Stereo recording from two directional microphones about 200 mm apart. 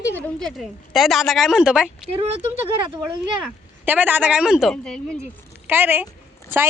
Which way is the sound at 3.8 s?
10° right (ahead or behind).